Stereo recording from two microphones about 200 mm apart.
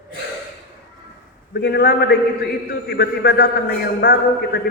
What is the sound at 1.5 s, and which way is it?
A man's voice, 55° left (ahead or behind).